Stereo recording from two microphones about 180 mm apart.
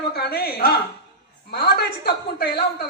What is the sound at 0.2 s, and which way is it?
A man's voice, 60° left (ahead or behind).